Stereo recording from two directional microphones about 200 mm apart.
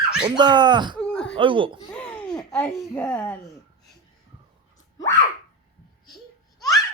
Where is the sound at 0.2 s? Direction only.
20° right (ahead or behind).